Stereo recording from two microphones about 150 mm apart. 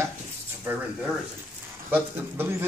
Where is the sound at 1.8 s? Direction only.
15° right (ahead or behind).